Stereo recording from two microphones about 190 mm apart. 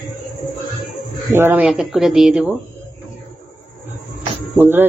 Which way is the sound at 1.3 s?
10° right (ahead or behind).